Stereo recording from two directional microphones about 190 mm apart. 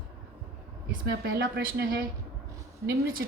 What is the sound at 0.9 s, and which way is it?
Speech, 55° right (ahead or behind).